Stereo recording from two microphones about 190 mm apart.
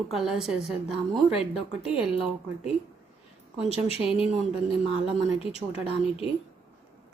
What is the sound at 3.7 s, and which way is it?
Speech, 35° left (ahead or behind).